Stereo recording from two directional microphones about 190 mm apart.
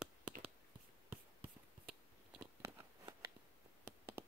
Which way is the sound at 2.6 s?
15° right (ahead or behind).